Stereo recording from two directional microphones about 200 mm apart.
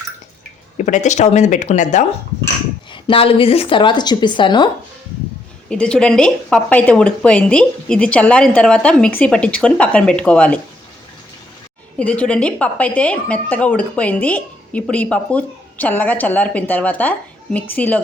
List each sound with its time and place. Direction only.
0.9 s speech: 35° left (ahead or behind)
2.9 s a woman's voice: 25° left (ahead or behind)
5.6 s speech: 5° left (ahead or behind)
11.9 s a woman's voice: 5° left (ahead or behind)